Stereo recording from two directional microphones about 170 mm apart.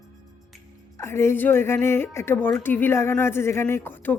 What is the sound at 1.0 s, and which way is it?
A woman's voice, 15° left (ahead or behind).